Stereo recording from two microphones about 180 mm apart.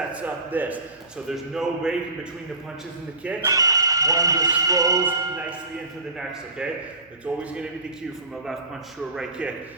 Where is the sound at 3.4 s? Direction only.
20° right (ahead or behind).